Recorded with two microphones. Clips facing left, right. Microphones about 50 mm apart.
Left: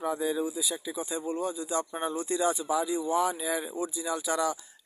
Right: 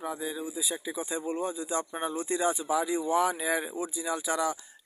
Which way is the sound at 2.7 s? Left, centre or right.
Right.